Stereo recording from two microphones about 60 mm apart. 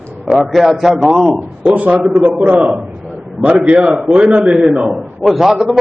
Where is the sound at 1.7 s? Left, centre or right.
Right.